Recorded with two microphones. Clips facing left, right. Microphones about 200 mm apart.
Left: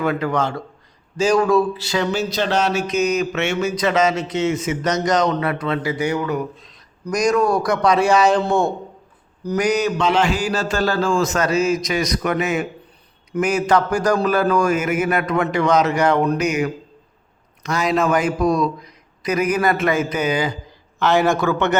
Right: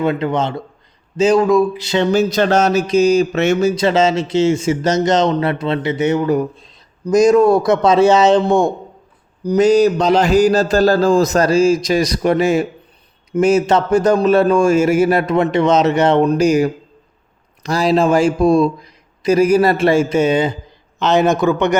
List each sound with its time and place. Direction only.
0.0 s speech: 25° right (ahead or behind)
2.1 s speech: 50° right (ahead or behind); by 8.7 s 15° right (ahead or behind)
9.4 s a sound: 15° right (ahead or behind)
9.6 s a man's voice: 35° right (ahead or behind); by 21.8 s 15° right (ahead or behind)